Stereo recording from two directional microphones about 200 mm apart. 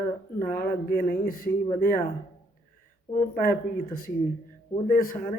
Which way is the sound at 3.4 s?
45° left (ahead or behind).